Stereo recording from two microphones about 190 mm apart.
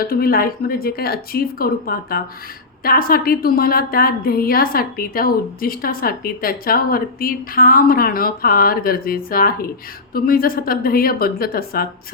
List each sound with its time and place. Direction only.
0.0 s a woman's voice: 50° left (ahead or behind)